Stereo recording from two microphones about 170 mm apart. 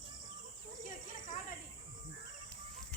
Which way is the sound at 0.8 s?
50° left (ahead or behind).